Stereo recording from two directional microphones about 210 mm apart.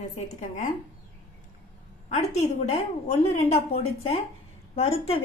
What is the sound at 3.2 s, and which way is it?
Speech, 30° left (ahead or behind).